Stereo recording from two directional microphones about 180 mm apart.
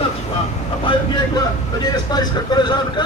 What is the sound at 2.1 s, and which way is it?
Speech, 25° left (ahead or behind).